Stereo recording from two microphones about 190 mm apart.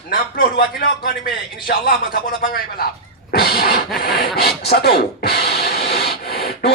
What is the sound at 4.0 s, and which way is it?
Speech, 50° left (ahead or behind).